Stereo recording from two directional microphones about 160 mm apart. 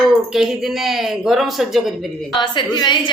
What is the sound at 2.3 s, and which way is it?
Speech, 30° left (ahead or behind).